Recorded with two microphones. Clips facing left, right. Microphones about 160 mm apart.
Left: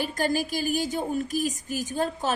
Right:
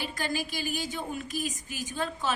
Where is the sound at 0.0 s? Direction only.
45° left (ahead or behind).